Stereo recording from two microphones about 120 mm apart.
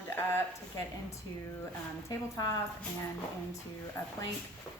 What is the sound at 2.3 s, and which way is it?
Speech, 30° left (ahead or behind).